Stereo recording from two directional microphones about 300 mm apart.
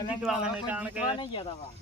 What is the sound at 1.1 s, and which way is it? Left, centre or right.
Speech, centre.